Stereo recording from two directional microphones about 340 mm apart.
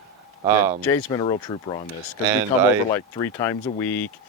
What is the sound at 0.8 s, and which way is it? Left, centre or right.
Speech, centre.